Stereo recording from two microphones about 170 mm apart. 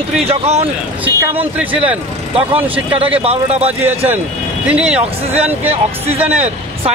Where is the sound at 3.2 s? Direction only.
35° right (ahead or behind).